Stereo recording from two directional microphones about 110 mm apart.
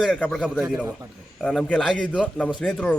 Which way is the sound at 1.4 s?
5° left (ahead or behind).